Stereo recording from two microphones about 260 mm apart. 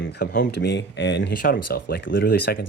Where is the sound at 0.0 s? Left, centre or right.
Left.